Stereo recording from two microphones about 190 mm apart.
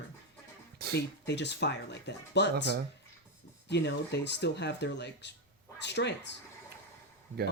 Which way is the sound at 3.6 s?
65° left (ahead or behind).